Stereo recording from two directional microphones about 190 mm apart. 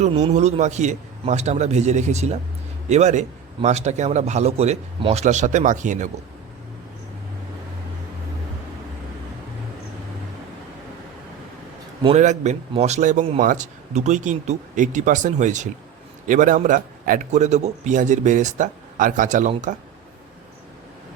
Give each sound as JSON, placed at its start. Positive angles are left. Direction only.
{"t": 0.0, "sound": "a man's voice", "side_deg": -35}
{"t": 12.0, "sound": "a man's voice", "side_deg": -35}